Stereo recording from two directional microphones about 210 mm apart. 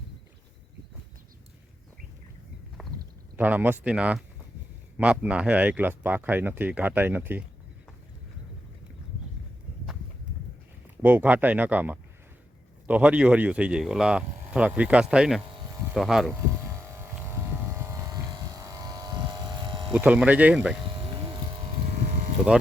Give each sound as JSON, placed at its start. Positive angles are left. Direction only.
{"t": 3.3, "sound": "speech", "side_deg": -10}
{"t": 11.0, "sound": "speech", "side_deg": -10}
{"t": 16.6, "sound": "vehicle", "side_deg": -10}
{"t": 19.9, "sound": "speech", "side_deg": -5}